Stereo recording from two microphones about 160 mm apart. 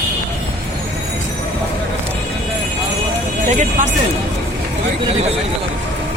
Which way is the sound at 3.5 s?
50° right (ahead or behind).